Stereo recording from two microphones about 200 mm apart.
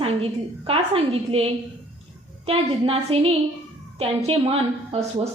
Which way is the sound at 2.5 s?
30° right (ahead or behind).